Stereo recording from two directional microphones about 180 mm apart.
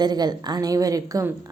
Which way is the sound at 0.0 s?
20° right (ahead or behind).